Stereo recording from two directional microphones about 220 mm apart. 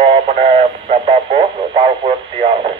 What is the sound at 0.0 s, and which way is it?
Speech, 25° right (ahead or behind).